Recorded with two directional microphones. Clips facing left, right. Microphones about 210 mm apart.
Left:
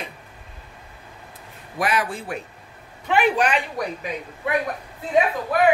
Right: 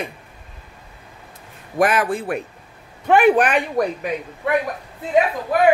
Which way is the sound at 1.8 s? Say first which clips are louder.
Right 6 dB; 50° right (ahead or behind).